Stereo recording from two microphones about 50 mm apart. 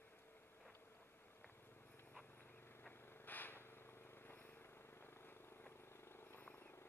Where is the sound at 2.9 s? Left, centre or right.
Left.